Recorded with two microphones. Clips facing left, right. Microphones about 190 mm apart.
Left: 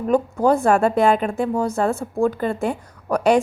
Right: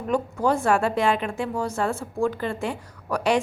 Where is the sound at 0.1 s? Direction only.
40° left (ahead or behind).